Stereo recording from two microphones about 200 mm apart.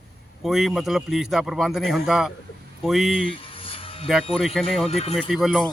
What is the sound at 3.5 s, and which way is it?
Music, 25° left (ahead or behind).